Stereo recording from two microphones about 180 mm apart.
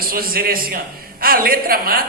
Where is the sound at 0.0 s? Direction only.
55° right (ahead or behind).